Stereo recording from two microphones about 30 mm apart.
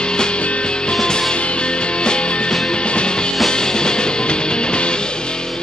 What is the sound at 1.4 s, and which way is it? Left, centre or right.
Music, left.